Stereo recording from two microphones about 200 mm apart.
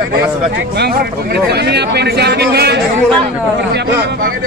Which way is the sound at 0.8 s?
50° right (ahead or behind).